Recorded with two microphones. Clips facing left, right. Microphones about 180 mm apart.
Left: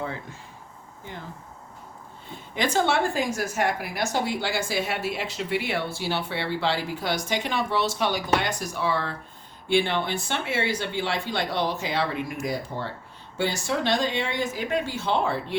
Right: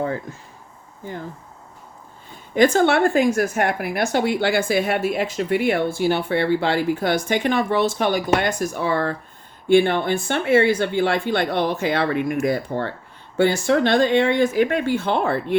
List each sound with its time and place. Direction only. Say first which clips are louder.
2.6 s a woman's voice: right 8 dB; 50° right (ahead or behind)